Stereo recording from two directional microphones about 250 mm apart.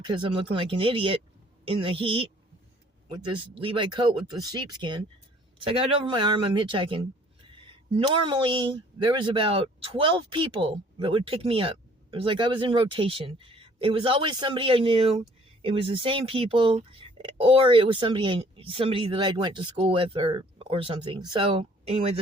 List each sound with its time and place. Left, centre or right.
0.0 s speech: centre